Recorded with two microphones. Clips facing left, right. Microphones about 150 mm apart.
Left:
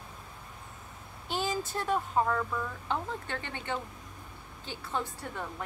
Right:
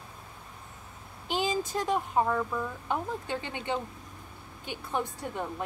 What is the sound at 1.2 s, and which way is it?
Speech, 15° right (ahead or behind).